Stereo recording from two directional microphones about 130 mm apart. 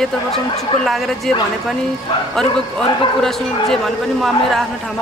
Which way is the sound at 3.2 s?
5° left (ahead or behind).